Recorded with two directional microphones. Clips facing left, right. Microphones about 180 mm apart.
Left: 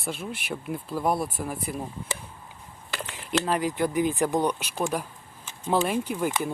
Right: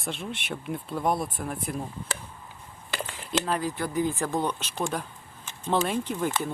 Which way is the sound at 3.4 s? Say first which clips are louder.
Left 3 dB; 20° left (ahead or behind).